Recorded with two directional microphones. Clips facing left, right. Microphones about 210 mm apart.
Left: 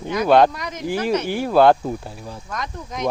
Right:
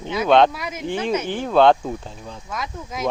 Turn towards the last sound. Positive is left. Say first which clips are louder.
# left 1 dB
turn(degrees=-5)  # may be behind; listen again after turning